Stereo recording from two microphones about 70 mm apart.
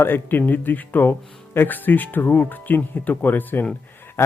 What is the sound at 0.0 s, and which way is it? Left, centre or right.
Speech, left.